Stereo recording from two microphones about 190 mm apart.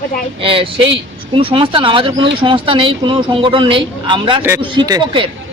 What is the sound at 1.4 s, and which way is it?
Speech, 25° right (ahead or behind).